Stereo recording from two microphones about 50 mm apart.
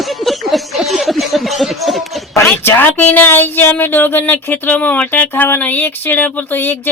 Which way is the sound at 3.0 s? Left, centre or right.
Left.